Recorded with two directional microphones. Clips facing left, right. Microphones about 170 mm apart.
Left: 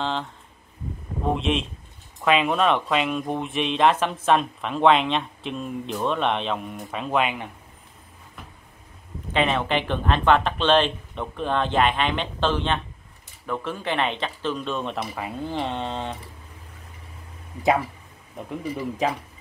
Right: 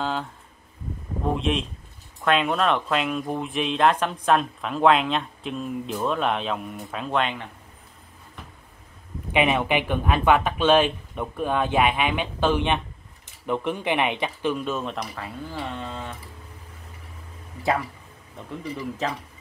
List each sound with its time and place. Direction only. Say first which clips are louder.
0.0 s a sound: even; 5° right (ahead or behind)
1.2 s speech: left 1 dB; centre (ahead or behind)
9.3 s speech: right 1 dB; 15° right (ahead or behind)
15.1 s speech: left 5 dB; 20° left (ahead or behind)
18.5 s speech: left 2 dB; 15° left (ahead or behind)